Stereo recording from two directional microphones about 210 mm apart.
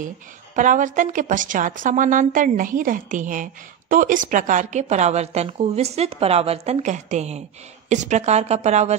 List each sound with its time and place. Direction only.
0.6 s a woman's voice: 40° right (ahead or behind)